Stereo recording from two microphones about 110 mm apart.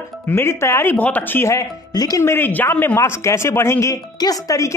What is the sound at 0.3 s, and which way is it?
Speech, 25° left (ahead or behind).